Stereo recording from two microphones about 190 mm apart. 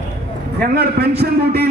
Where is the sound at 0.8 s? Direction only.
55° right (ahead or behind).